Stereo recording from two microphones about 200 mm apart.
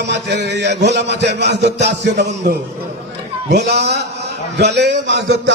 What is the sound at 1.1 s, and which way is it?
A man's voice, 60° right (ahead or behind).